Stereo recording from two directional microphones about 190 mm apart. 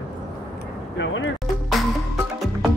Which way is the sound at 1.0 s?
80° left.